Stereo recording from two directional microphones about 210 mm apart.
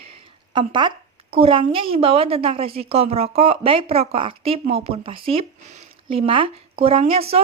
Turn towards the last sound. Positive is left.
turn(degrees=-25)  # may be behind; listen again after turning